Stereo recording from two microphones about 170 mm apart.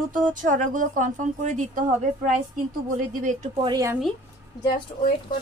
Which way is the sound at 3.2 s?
50° right (ahead or behind).